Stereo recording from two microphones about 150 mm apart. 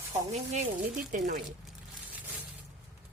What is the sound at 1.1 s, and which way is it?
Speech, 60° right (ahead or behind).